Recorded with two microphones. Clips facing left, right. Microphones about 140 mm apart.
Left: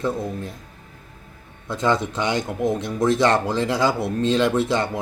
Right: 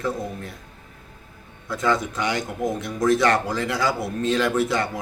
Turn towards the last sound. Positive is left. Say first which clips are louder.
# left 1 dB
turn(degrees=25)  # may be behind; listen again after turning